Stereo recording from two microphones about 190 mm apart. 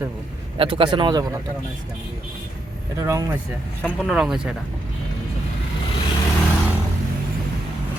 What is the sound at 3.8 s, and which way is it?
Speech, centre (ahead or behind).